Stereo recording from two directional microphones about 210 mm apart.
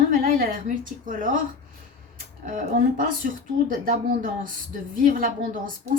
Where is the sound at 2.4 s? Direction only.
40° right (ahead or behind).